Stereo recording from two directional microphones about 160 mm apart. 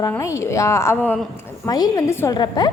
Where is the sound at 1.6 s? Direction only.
25° left (ahead or behind).